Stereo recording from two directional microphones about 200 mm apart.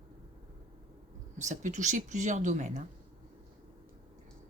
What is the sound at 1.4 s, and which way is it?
Speech, 35° right (ahead or behind).